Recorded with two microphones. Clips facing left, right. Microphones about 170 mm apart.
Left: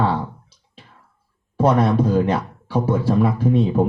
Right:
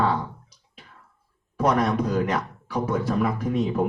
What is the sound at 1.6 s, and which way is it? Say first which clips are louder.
Speech: left 5 dB; 30° left (ahead or behind).